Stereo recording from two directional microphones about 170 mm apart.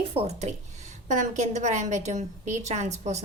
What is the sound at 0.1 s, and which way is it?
A woman's voice, 40° right (ahead or behind).